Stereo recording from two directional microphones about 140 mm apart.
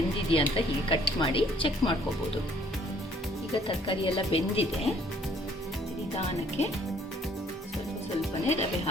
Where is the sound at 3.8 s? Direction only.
40° left (ahead or behind).